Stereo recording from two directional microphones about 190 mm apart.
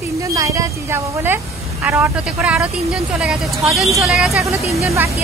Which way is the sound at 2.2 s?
Centre (ahead or behind).